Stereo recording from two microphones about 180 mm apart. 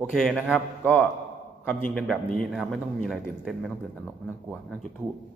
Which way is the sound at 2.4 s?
Centre (ahead or behind).